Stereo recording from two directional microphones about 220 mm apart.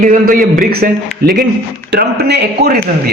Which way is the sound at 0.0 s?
40° right (ahead or behind).